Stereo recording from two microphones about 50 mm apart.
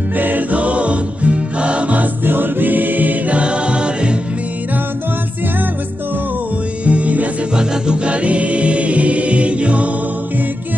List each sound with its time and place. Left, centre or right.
0.1 s music: right
2.2 s choir: right
6.8 s music: right